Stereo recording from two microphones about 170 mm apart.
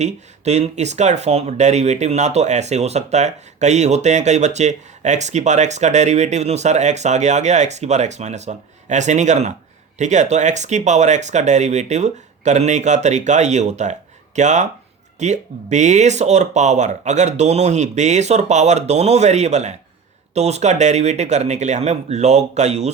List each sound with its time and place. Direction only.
0.0 s speech: 40° right (ahead or behind)